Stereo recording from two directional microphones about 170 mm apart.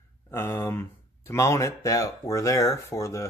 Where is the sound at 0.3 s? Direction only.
15° left (ahead or behind).